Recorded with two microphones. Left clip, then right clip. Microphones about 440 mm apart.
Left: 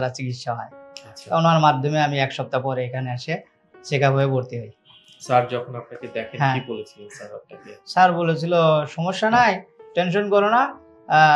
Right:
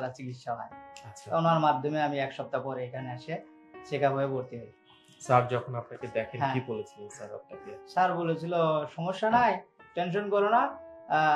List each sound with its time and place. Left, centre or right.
0.0 s speech: left
5.2 s speech: right
7.9 s speech: left